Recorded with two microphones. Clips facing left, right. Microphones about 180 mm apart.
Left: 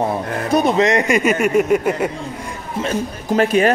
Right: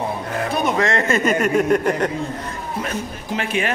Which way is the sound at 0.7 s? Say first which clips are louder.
Left 4 dB; 15° left (ahead or behind).